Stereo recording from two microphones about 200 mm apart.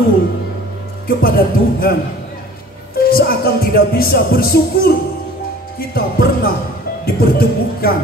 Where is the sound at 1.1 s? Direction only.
50° left (ahead or behind).